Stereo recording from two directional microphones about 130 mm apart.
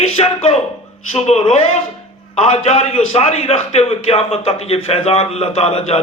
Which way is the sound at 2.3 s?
60° left (ahead or behind).